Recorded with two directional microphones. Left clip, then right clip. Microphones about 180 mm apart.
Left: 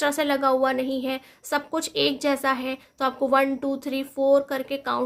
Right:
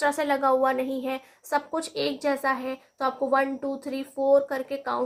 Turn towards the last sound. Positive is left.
turn(degrees=35)  # may be behind; listen again after turning